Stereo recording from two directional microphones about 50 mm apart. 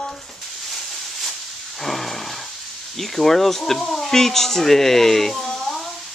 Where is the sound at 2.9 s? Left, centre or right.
Centre.